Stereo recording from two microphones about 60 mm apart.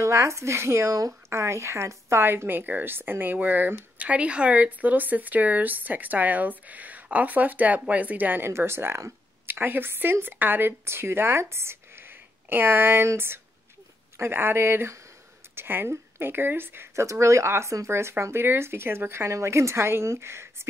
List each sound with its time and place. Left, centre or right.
0.0 s speech: right
0.8 s speech: right
1.3 s speech: right
2.2 s speech: right
8.5 s speech: right
9.5 s speech: right
17.0 s speech: right